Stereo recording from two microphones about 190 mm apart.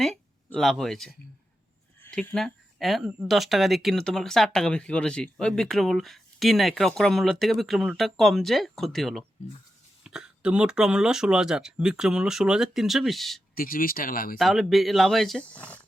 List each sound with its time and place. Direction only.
0.0 s speech: centre (ahead or behind)
13.6 s speech: 50° left (ahead or behind)
14.3 s speech: centre (ahead or behind)